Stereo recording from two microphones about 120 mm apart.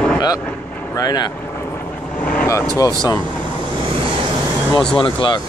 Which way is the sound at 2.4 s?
25° left (ahead or behind).